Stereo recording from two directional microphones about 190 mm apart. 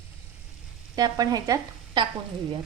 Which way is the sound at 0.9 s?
20° right (ahead or behind).